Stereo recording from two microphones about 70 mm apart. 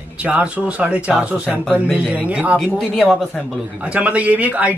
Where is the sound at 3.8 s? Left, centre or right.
Centre.